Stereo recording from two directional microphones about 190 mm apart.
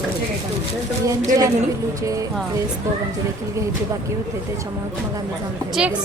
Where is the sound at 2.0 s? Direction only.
15° right (ahead or behind).